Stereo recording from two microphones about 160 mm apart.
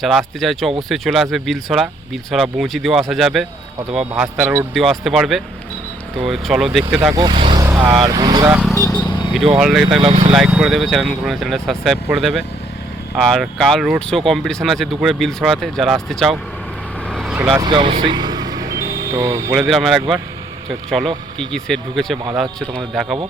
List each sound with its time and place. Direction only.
0.0 s speech: centre (ahead or behind)
7.1 s speech: 25° right (ahead or behind)
7.6 s vehicle: 20° right (ahead or behind)
8.0 s speech: 25° right (ahead or behind)
8.7 s vehicle: 25° left (ahead or behind)
9.6 s speech: centre (ahead or behind)
10.0 s speech: 30° right (ahead or behind)
10.3 s speech: 5° right (ahead or behind)
17.1 s vehicle: centre (ahead or behind)
17.5 s vehicle: 30° right (ahead or behind)
19.5 s speech: centre (ahead or behind)